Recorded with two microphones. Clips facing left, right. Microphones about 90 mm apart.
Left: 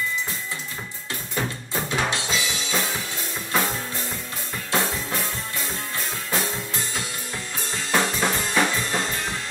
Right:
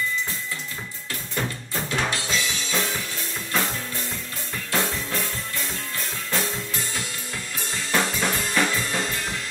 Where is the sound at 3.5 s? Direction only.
15° left (ahead or behind).